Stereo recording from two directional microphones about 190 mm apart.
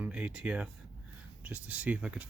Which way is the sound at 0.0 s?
5° right (ahead or behind).